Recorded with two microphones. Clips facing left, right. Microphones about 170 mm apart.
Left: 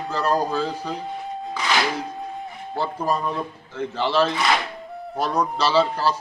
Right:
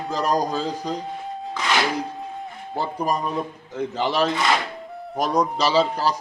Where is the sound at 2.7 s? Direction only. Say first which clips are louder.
Even; 15° right (ahead or behind).